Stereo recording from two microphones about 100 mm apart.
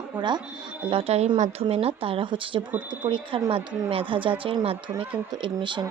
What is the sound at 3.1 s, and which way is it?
Speech, 60° right (ahead or behind).